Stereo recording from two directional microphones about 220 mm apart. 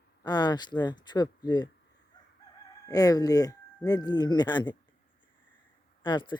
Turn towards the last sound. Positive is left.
turn(degrees=20)  # may be behind; listen again after turning